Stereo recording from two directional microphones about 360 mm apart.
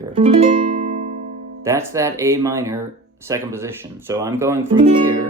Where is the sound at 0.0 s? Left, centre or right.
Centre.